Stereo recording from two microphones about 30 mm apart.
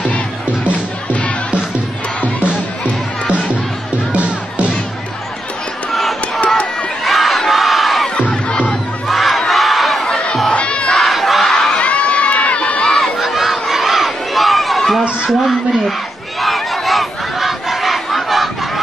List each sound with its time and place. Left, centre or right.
4.1 s music: right
5.9 s crowd: centre
7.1 s battle cry: centre
9.0 s crowd: centre
10.5 s crowd: left
10.9 s battle cry: centre
11.8 s crowd: left
12.8 s crowd: centre
13.2 s crowd: centre
14.8 s a sound: centre
16.3 s battle cry: centre